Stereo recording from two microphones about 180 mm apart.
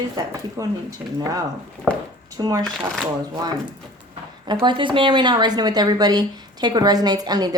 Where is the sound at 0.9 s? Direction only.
20° right (ahead or behind).